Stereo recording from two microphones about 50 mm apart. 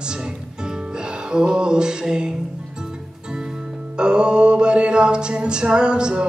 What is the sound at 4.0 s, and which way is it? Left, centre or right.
Mantra, centre.